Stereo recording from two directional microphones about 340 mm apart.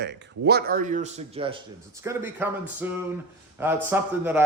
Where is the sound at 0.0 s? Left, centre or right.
Right.